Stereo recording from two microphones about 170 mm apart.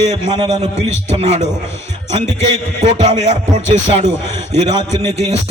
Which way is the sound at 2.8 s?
40° right (ahead or behind).